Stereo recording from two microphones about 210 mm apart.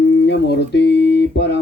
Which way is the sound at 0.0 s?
55° left (ahead or behind).